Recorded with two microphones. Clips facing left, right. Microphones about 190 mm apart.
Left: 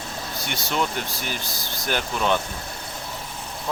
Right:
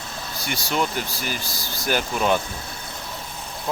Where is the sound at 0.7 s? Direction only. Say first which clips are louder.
Right 1 dB; 5° right (ahead or behind).